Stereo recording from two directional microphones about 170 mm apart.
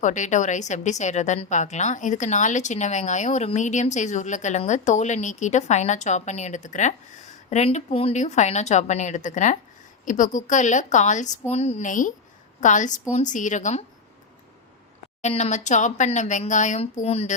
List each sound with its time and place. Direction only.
0.0 s a woman's voice: 45° left (ahead or behind)
15.2 s a woman's voice: 40° left (ahead or behind)